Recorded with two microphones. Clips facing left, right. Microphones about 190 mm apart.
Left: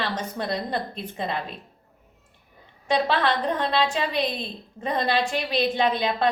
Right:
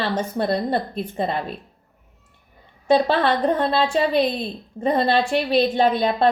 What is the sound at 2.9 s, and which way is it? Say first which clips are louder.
Speech: right 5 dB; 45° right (ahead or behind).